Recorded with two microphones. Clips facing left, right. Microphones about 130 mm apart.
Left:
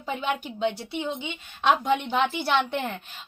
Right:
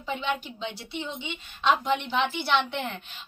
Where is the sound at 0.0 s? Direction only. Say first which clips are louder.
Left 1 dB; 45° left (ahead or behind).